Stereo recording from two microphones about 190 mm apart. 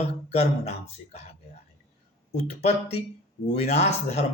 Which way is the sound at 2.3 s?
35° left (ahead or behind).